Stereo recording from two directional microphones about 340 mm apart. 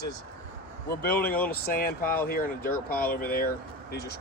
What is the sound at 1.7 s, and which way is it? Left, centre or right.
Speech, left.